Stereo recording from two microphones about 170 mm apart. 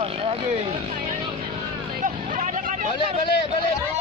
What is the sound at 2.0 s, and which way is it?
Hubbub, 50° right (ahead or behind).